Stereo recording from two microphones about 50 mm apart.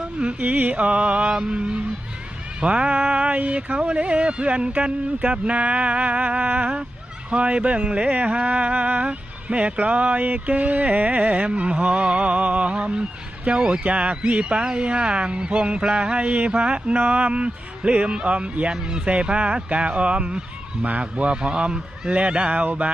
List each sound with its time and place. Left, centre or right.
0.3 s speech: right
16.5 s speech: right